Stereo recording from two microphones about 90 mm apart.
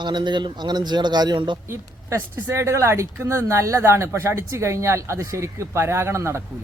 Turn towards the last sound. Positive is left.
turn(degrees=-30)  # may be behind; listen again after turning